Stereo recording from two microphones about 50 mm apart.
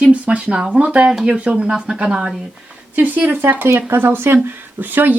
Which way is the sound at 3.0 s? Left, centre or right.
Right.